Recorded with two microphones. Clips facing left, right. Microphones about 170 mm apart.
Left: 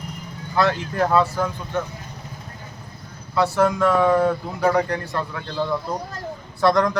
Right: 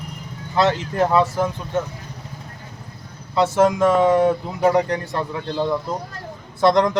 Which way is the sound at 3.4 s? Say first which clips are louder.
Right 2 dB; 20° right (ahead or behind).